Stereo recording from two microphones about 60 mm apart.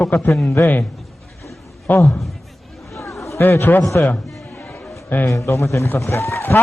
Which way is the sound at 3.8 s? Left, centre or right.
Left.